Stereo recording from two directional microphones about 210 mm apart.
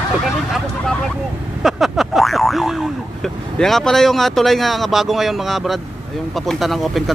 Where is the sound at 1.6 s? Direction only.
Centre (ahead or behind).